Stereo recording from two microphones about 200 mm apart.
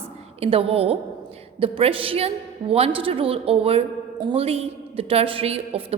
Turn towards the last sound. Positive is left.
turn(degrees=-30)  # may be behind; listen again after turning